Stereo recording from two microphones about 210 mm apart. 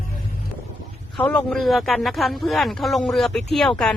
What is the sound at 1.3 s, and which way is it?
Speech, centre (ahead or behind).